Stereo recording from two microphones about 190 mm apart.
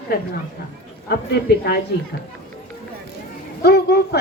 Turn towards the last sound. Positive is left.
turn(degrees=60)  # may be behind; listen again after turning